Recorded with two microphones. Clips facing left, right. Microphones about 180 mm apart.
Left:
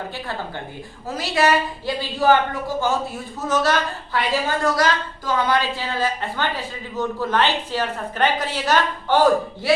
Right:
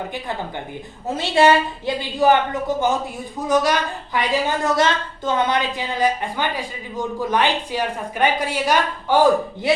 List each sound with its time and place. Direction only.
1.0 s speech: 25° right (ahead or behind)